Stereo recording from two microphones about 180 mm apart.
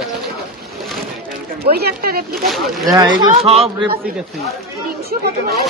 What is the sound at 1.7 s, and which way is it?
Speech, 60° right (ahead or behind).